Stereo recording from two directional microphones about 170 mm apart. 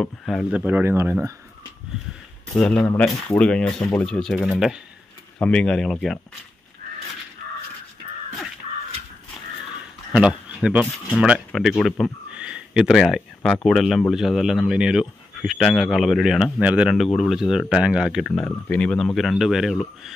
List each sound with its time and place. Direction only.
0.0 s speech: 5° left (ahead or behind); by 1.3 s 15° right (ahead or behind)
2.5 s speech: 5° left (ahead or behind)
10.1 s speech: 5° right (ahead or behind)